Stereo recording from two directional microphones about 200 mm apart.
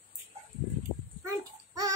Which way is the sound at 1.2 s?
15° right (ahead or behind).